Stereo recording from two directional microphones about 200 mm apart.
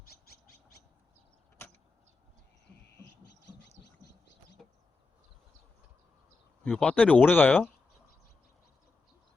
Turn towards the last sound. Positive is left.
turn(degrees=10)  # may be behind; listen again after turning